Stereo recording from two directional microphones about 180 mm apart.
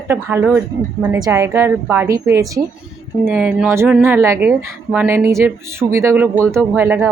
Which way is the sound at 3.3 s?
10° right (ahead or behind).